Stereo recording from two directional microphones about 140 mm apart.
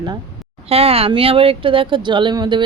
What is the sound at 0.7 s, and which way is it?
Speech, 45° right (ahead or behind).